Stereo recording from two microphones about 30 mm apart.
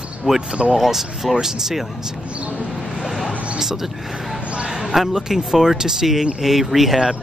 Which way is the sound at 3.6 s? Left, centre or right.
Centre.